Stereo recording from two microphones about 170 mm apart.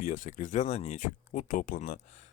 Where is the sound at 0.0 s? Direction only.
50° left (ahead or behind).